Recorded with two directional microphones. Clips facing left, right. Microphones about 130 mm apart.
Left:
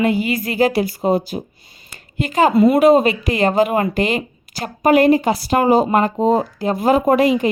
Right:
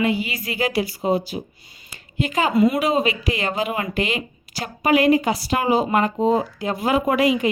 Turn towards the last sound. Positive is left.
turn(degrees=40)  # may be behind; listen again after turning